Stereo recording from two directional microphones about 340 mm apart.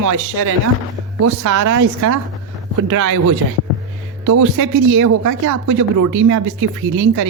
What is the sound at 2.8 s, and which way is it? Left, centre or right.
Speech, right.